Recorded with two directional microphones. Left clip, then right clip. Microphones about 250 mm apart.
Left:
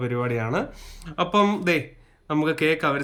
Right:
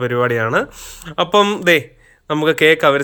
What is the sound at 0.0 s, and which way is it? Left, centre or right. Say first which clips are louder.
Speech: right 10 dB; centre.